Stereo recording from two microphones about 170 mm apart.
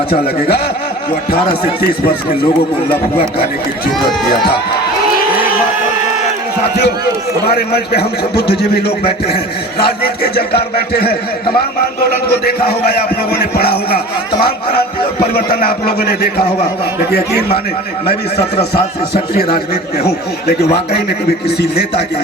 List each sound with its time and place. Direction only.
0.1 s a man's voice: 65° left (ahead or behind)
7.5 s a man's voice: 70° left (ahead or behind)
12.5 s a man's voice: 65° left (ahead or behind)
15.4 s a man's voice: 65° left (ahead or behind)
18.5 s speech: 35° left (ahead or behind)
19.3 s a man's voice: 65° left (ahead or behind)
21.4 s a man's voice: 70° left (ahead or behind)